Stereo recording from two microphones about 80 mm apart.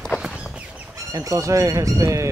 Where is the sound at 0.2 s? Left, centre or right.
Centre.